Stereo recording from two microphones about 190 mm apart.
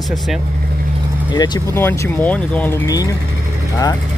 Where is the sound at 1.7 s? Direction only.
10° left (ahead or behind).